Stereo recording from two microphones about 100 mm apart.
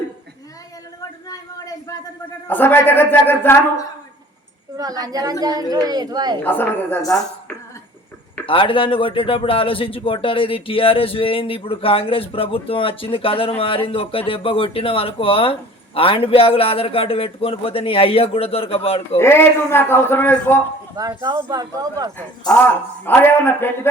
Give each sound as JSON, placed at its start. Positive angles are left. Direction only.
{"t": 1.3, "sound": "a sound", "side_deg": 35}
{"t": 2.5, "sound": "a man's voice", "side_deg": 20}
{"t": 4.8, "sound": "speech", "side_deg": -40}
{"t": 6.4, "sound": "a man's voice", "side_deg": 20}
{"t": 8.4, "sound": "a man's voice", "side_deg": 60}
{"t": 19.1, "sound": "a man's voice", "side_deg": 25}
{"t": 20.9, "sound": "speech", "side_deg": -40}
{"t": 22.6, "sound": "a man's voice", "side_deg": 20}